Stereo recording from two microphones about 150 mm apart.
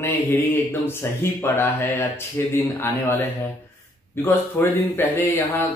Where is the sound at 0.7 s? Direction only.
15° left (ahead or behind).